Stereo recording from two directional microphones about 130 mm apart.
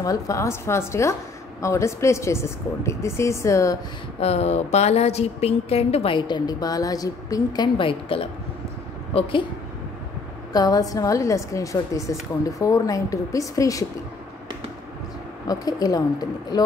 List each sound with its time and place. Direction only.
0.0 s a woman's voice: 25° left (ahead or behind)
4.2 s a woman's voice: 55° left (ahead or behind)
10.5 s a woman's voice: 30° left (ahead or behind)
15.4 s a woman's voice: 30° left (ahead or behind)